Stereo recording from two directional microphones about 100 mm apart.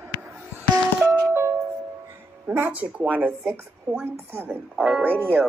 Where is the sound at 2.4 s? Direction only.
20° right (ahead or behind).